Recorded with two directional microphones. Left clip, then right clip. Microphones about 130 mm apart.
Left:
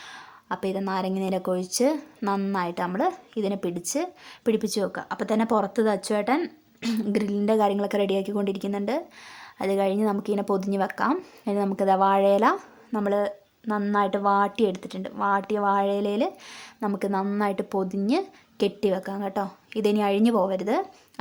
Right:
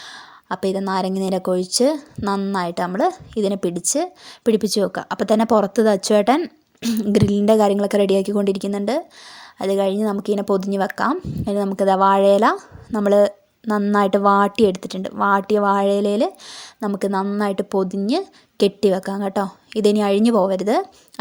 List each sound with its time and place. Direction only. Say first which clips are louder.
0.0 s a woman's voice: right 5 dB; 30° right (ahead or behind); by 6.4 s 45° right (ahead or behind)
6.4 s speech: right 5 dB; 25° right (ahead or behind)
7.1 s a woman's voice: right 9 dB; 45° right (ahead or behind)